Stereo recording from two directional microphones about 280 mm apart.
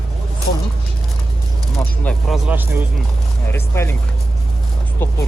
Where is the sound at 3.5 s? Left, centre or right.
Centre.